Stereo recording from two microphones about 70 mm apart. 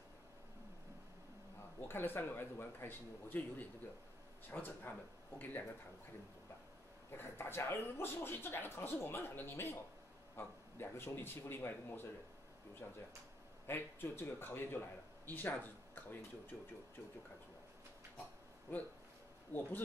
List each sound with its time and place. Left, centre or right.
1.9 s speech: left
7.1 s speech: left
12.8 s speech: left
13.7 s speech: left
18.7 s speech: left